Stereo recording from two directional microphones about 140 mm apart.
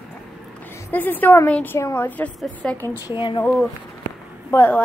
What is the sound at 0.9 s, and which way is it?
Speech, 15° left (ahead or behind).